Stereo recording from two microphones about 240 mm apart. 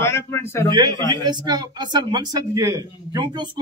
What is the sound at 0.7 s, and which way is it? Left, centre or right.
Speech, centre.